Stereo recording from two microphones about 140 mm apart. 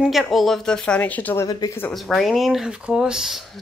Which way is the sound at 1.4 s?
25° left (ahead or behind).